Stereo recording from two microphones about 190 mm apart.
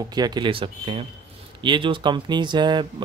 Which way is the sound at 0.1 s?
20° right (ahead or behind).